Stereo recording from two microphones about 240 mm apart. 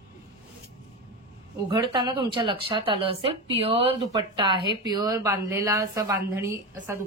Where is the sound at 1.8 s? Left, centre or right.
Centre.